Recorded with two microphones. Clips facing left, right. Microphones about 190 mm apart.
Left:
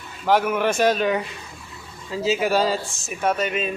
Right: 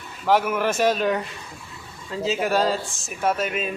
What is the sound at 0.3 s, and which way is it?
Speech, centre (ahead or behind).